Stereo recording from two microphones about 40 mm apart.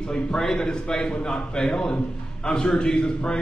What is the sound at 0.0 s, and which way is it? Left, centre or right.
A man's voice, centre.